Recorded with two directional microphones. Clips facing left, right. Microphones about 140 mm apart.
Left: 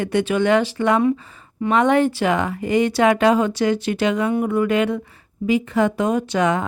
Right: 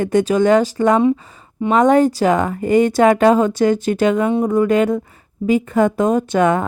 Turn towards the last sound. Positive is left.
turn(degrees=-50)  # may be behind; listen again after turning